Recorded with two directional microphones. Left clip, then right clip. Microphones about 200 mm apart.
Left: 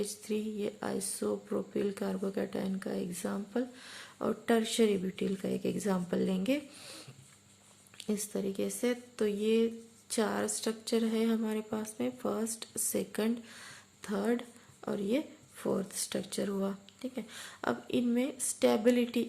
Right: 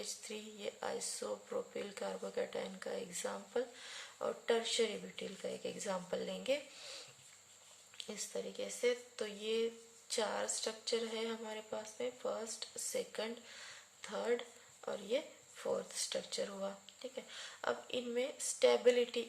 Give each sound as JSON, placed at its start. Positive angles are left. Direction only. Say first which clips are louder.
{"t": 0.0, "sound": "speech", "louder": "left 10 dB", "side_deg": 20}